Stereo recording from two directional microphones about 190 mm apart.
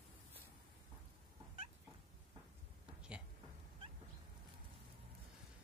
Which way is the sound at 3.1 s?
5° right (ahead or behind).